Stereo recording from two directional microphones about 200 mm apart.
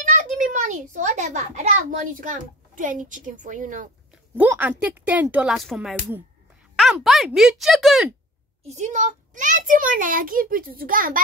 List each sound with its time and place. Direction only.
0.0 s a child's voice: 40° right (ahead or behind)
4.4 s speech: 10° right (ahead or behind)
8.6 s a child's voice: 35° right (ahead or behind)